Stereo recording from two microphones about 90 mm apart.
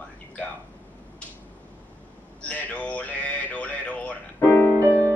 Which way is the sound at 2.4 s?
15° left (ahead or behind).